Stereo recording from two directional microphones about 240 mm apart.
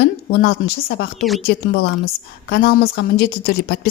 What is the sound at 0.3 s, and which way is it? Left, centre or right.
A woman's voice, left.